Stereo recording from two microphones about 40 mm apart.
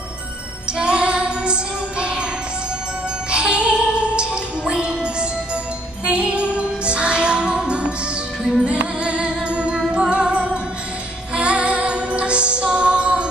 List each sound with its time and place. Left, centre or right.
0.7 s music: right
3.3 s music: right